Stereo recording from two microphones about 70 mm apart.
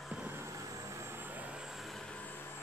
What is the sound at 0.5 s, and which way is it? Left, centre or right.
Vehicle, right.